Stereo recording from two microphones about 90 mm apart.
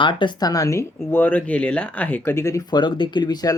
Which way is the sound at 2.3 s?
35° left (ahead or behind).